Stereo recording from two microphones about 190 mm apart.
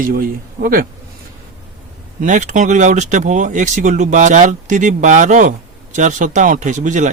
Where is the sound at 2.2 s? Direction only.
40° right (ahead or behind).